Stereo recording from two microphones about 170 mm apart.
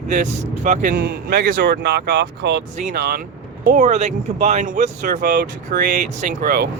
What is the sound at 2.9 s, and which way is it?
Speech, 70° right (ahead or behind).